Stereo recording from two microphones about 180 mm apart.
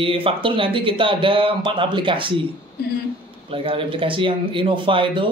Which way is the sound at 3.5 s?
30° right (ahead or behind).